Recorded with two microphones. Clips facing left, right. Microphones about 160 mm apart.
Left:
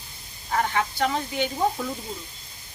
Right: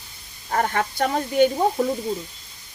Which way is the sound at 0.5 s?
50° right (ahead or behind).